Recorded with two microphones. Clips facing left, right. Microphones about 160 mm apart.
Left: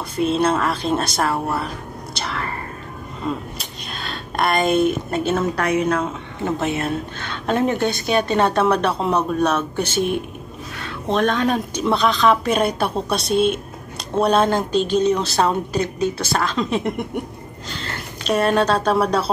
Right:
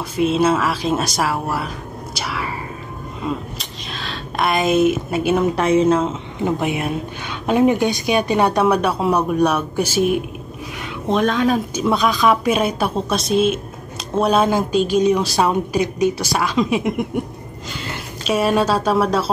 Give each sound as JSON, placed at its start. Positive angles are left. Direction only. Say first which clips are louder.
{"t": 0.1, "sound": "speech", "louder": "right 2 dB", "side_deg": -5}
{"t": 10.8, "sound": "a sound", "louder": "right 1 dB", "side_deg": -15}
{"t": 11.2, "sound": "speech", "louder": "right 2 dB", "side_deg": 0}